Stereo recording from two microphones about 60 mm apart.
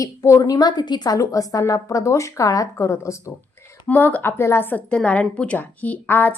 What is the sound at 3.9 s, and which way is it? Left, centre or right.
Speech, left.